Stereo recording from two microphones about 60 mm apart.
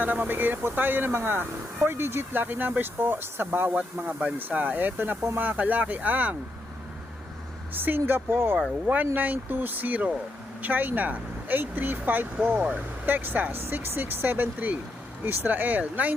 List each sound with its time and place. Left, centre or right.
0.0 s speech: right
3.8 s speech: right
7.7 s speech: right